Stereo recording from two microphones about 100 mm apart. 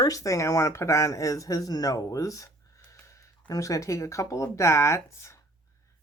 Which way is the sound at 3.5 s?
35° left (ahead or behind).